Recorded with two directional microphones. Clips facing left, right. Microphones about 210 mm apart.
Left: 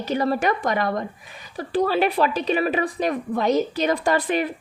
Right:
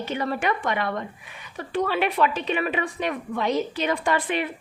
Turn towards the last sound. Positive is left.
turn(degrees=40)  # may be behind; listen again after turning